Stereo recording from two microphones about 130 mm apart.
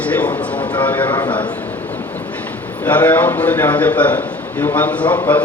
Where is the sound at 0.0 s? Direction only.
10° left (ahead or behind).